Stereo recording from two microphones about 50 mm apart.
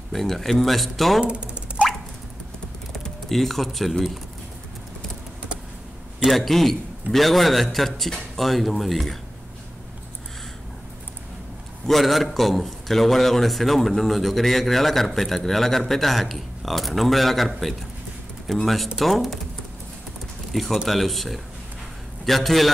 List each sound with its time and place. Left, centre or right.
0.1 s a man's voice: centre
1.2 s speech: right
1.7 s a sound: right
2.9 s speech: centre
6.2 s a man's voice: centre
11.9 s a man's voice: centre
20.5 s a man's voice: centre